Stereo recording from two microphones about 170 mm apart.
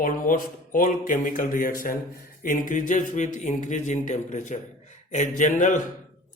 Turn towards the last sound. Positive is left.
turn(degrees=45)  # may be behind; listen again after turning